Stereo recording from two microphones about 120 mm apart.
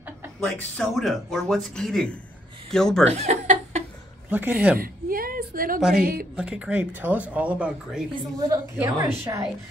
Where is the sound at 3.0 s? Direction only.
70° right (ahead or behind).